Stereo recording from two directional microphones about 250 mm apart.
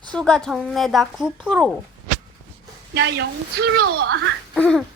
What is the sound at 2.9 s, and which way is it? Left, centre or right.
Speech, right.